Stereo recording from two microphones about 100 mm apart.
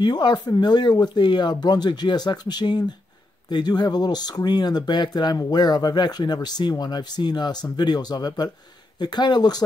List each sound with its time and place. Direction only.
0.0 s speech: 45° left (ahead or behind)